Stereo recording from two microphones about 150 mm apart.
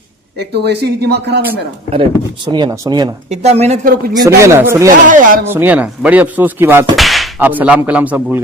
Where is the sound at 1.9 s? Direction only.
30° right (ahead or behind).